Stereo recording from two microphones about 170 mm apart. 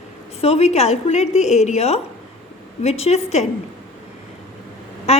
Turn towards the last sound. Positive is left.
turn(degrees=40)  # may be behind; listen again after turning